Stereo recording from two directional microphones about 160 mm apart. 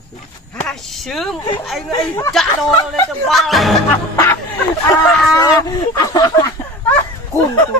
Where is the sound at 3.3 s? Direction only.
Centre (ahead or behind).